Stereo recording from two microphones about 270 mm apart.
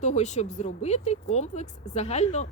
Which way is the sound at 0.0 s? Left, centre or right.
Left.